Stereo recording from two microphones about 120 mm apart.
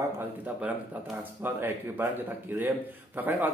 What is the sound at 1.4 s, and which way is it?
Speech, 15° right (ahead or behind).